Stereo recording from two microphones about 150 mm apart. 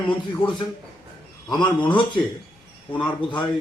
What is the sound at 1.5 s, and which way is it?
Speech, 30° left (ahead or behind).